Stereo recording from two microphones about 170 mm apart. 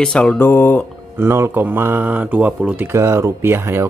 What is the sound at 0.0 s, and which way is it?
Speech, 5° left (ahead or behind).